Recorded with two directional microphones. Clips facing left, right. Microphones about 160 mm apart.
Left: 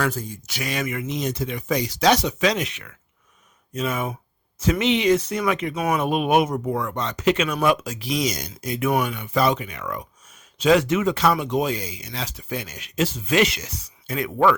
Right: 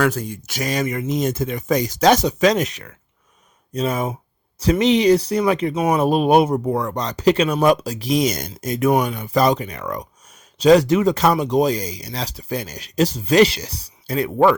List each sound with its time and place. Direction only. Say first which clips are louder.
0.0 s speech: right 5 dB; 70° right (ahead or behind)
0.5 s speech: right 5 dB; 40° right (ahead or behind)